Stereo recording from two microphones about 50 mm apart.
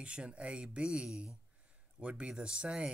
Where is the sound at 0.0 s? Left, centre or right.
Right.